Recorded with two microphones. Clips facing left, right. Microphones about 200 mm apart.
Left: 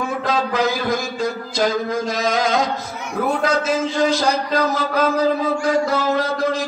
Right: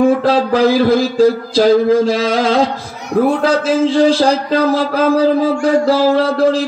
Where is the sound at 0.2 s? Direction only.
30° right (ahead or behind).